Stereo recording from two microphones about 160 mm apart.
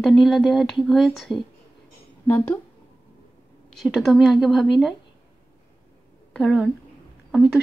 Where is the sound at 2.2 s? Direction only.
15° left (ahead or behind).